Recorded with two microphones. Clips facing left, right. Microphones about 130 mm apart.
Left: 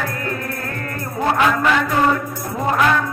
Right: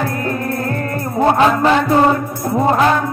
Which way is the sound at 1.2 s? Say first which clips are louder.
Right 5 dB; 30° right (ahead or behind).